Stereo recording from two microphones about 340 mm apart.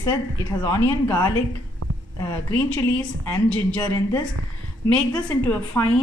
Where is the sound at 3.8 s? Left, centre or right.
Centre.